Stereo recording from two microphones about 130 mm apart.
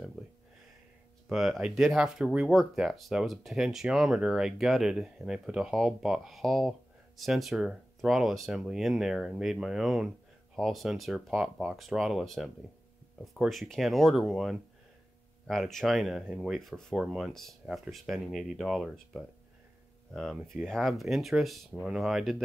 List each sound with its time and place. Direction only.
1.3 s speech: centre (ahead or behind)